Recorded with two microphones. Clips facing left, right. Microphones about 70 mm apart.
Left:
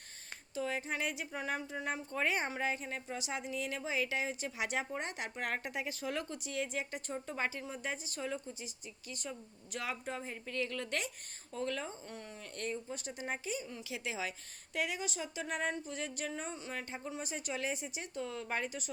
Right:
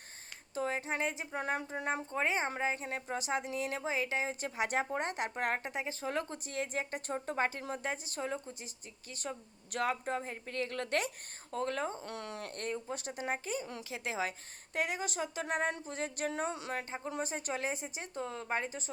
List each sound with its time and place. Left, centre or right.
0.5 s a sound: right
1.4 s a woman's voice: right
2.0 s speech: right
2.7 s a woman's voice: right
12.0 s speech: right
12.5 s speech: right
16.3 s speech: right
17.1 s a woman's voice: right